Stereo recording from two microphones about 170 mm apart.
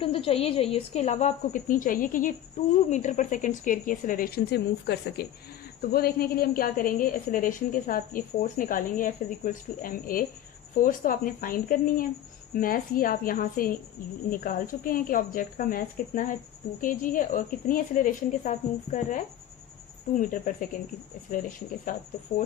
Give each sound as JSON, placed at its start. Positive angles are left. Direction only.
{"t": 0.0, "sound": "a woman's voice", "side_deg": 35}
{"t": 5.9, "sound": "a woman's voice", "side_deg": 65}
{"t": 21.9, "sound": "a woman's voice", "side_deg": 50}
{"t": 22.3, "sound": "a woman's voice", "side_deg": 30}